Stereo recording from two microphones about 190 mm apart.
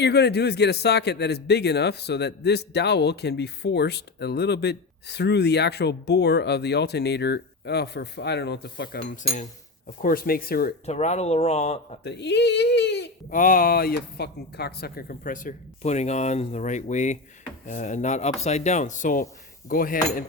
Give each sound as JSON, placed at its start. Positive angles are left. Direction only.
{"t": 0.0, "sound": "a man's voice", "side_deg": 60}
{"t": 9.2, "sound": "speech", "side_deg": 40}
{"t": 10.8, "sound": "speech", "side_deg": 35}
{"t": 12.0, "sound": "a man's voice", "side_deg": 65}
{"t": 13.3, "sound": "speech", "side_deg": 45}